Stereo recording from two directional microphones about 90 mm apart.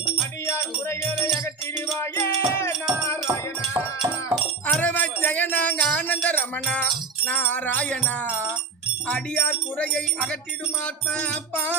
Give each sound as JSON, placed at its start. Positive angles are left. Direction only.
{"t": 0.4, "sound": "music", "side_deg": 30}
{"t": 4.8, "sound": "music", "side_deg": 20}
{"t": 9.0, "sound": "speech", "side_deg": 10}